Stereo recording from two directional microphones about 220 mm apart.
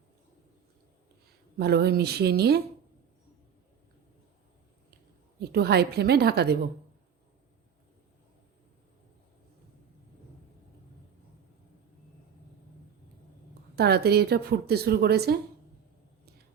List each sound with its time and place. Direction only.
1.5 s a woman's voice: 45° right (ahead or behind)
5.4 s a woman's voice: 45° right (ahead or behind)
13.7 s a woman's voice: 45° right (ahead or behind)